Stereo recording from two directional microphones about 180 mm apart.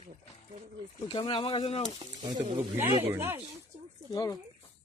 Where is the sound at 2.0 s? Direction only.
25° right (ahead or behind).